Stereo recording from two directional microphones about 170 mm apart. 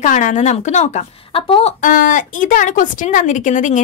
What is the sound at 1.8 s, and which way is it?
Speech, 50° left (ahead or behind).